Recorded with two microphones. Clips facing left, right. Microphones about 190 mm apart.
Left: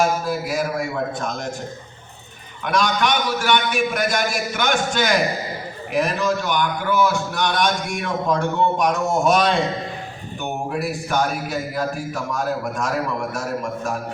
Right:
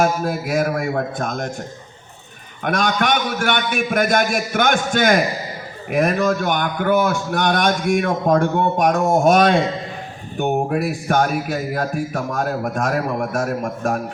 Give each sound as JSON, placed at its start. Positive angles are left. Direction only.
{"t": 0.0, "sound": "a man's voice", "side_deg": -55}
{"t": 2.6, "sound": "a man's voice", "side_deg": -50}